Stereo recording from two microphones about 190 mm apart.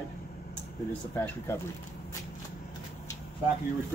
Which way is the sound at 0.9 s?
10° left (ahead or behind).